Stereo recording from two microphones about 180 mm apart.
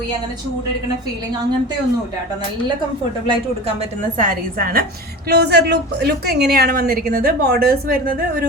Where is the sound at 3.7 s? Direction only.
50° right (ahead or behind).